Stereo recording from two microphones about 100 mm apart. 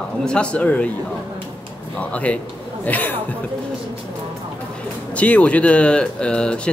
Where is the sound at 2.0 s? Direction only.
15° left (ahead or behind).